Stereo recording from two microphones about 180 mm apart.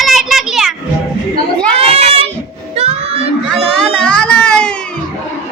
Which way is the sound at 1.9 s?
35° right (ahead or behind).